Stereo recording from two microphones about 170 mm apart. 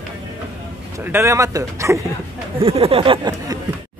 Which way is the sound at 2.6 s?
35° right (ahead or behind).